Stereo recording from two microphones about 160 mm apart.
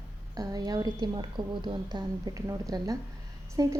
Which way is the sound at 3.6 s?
20° right (ahead or behind).